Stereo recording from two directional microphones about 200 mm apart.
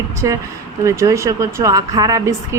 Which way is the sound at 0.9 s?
15° right (ahead or behind).